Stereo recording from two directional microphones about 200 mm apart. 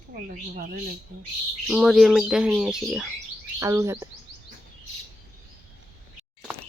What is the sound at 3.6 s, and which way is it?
Speech, 15° right (ahead or behind).